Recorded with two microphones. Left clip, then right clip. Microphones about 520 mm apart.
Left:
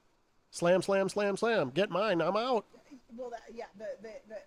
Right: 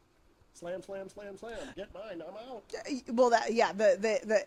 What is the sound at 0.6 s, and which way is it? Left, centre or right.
Speech, left.